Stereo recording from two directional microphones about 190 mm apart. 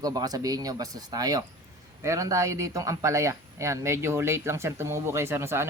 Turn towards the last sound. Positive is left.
turn(degrees=-15)  # may be behind; listen again after turning